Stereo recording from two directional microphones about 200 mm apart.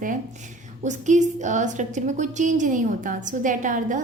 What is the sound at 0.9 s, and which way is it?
A woman's voice, 35° right (ahead or behind).